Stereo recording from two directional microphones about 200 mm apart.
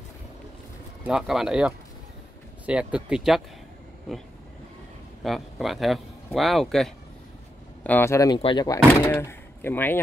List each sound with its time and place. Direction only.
1.0 s speech: 5° right (ahead or behind)
5.2 s speech: centre (ahead or behind); by 8.7 s 25° left (ahead or behind)
9.0 s speech: 10° left (ahead or behind)